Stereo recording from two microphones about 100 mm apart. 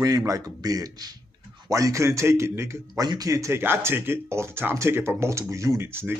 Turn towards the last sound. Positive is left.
turn(degrees=-25)  # may be behind; listen again after turning